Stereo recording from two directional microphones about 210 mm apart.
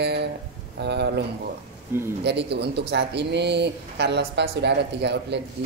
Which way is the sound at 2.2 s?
55° right (ahead or behind).